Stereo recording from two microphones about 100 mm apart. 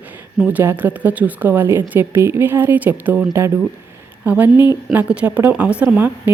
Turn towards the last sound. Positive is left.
turn(degrees=-20)  # may be behind; listen again after turning